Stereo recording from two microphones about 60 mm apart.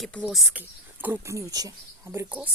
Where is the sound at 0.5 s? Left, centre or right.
Right.